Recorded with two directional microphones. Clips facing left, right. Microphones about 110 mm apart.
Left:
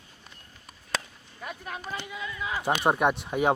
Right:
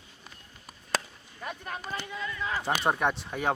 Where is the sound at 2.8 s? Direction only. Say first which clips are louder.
Left 4 dB; 15° left (ahead or behind).